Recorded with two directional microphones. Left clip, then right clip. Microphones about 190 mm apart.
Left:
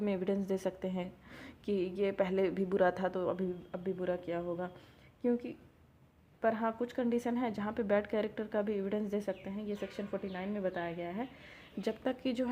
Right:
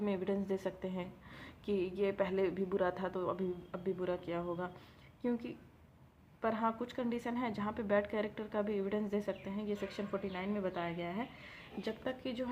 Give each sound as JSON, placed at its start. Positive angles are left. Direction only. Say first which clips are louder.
{"t": 0.0, "sound": "speech", "louder": "left 2 dB", "side_deg": 30}
{"t": 11.8, "sound": "a woman's voice", "louder": "left 5 dB", "side_deg": 40}